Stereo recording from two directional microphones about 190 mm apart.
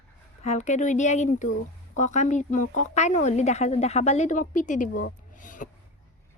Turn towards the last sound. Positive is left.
turn(degrees=45)  # may be behind; listen again after turning